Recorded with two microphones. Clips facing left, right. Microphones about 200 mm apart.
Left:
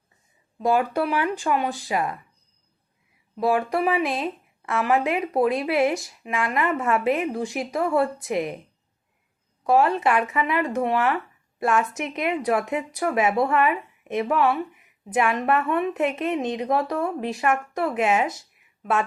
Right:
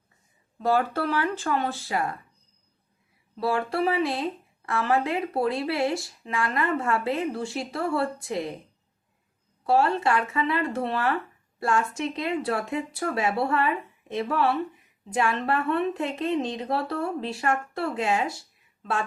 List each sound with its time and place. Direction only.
0.8 s speech: 15° left (ahead or behind)
3.4 s speech: 20° left (ahead or behind)
9.6 s a woman's voice: 20° left (ahead or behind)